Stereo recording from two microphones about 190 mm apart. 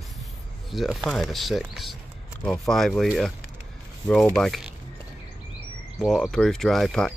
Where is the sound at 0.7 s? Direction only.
Centre (ahead or behind).